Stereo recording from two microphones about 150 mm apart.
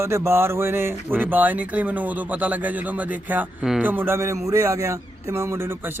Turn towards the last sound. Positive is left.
turn(degrees=-15)  # may be behind; listen again after turning